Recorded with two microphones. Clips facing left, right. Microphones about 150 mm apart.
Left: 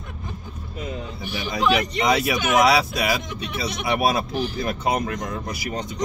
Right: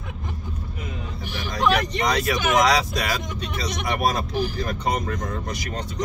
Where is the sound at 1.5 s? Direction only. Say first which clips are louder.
Even; 5° left (ahead or behind).